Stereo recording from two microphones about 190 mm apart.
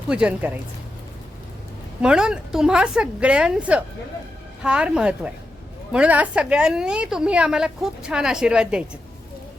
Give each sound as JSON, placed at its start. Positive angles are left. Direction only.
{"t": 0.1, "sound": "speech", "side_deg": -5}
{"t": 2.0, "sound": "a woman's voice", "side_deg": -5}